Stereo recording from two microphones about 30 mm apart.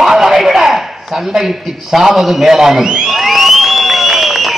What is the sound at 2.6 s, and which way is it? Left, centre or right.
Speech, centre.